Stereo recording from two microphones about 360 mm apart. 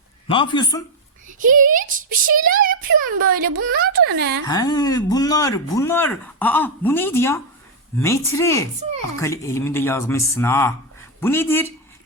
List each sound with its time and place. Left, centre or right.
0.3 s speech: centre
1.3 s a child's voice: right
4.4 s speech: centre